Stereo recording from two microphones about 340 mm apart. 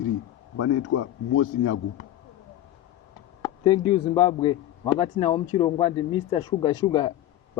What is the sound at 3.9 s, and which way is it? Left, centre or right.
A man's voice, centre.